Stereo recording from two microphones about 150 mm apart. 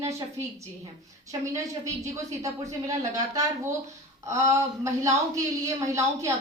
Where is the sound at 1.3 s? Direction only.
20° right (ahead or behind).